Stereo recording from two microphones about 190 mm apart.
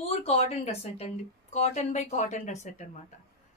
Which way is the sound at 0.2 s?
35° left (ahead or behind).